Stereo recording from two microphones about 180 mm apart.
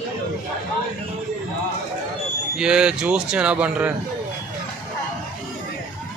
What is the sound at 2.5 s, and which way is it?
A man's voice, 5° right (ahead or behind).